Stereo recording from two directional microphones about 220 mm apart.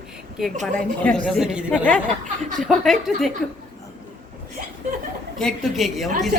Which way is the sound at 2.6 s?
Centre (ahead or behind).